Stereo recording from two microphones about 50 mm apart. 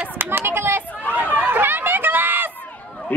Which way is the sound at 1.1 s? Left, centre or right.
Right.